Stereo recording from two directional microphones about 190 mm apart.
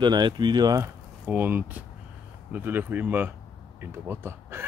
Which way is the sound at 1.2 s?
10° right (ahead or behind).